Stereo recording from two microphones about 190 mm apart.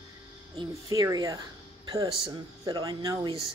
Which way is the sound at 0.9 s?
20° right (ahead or behind).